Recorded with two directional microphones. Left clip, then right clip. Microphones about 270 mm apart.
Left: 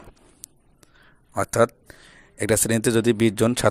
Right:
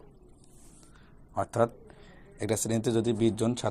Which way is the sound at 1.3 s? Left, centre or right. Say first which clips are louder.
Left 7 dB; left.